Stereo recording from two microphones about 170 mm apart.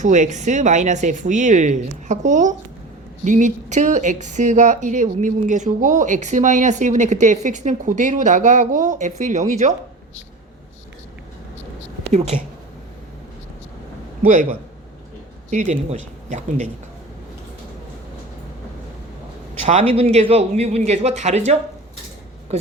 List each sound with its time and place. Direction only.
0.0 s speech: 45° right (ahead or behind)
14.2 s a man's voice: 50° right (ahead or behind)
15.4 s speech: 45° right (ahead or behind)
20.0 s speech: 35° right (ahead or behind)